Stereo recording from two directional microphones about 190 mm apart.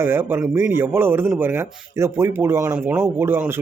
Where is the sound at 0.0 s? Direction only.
10° right (ahead or behind).